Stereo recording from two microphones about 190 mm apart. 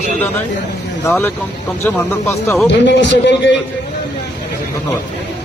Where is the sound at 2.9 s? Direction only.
70° left (ahead or behind).